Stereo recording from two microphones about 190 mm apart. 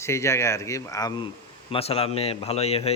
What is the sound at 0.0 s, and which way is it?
A man's voice, 15° left (ahead or behind).